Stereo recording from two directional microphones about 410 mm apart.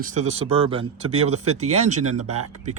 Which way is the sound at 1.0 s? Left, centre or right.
Right.